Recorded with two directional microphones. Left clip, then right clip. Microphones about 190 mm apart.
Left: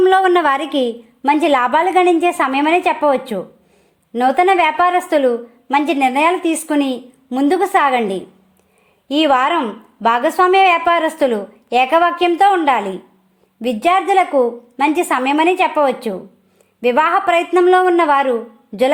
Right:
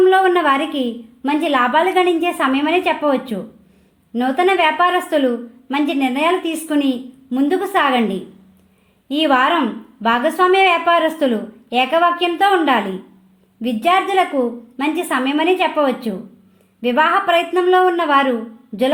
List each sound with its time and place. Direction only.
0.0 s a woman's voice: 50° left (ahead or behind)